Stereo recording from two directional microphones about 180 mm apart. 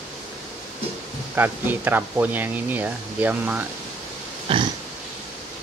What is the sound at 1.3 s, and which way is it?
Speech, 10° right (ahead or behind).